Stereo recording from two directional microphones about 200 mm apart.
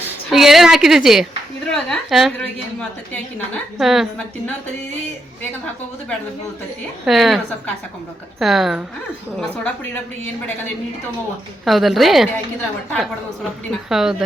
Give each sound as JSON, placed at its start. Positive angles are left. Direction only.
{"t": 0.3, "sound": "a woman's voice", "side_deg": 0}
{"t": 7.0, "sound": "a woman's voice", "side_deg": 0}
{"t": 11.6, "sound": "a woman's voice", "side_deg": 0}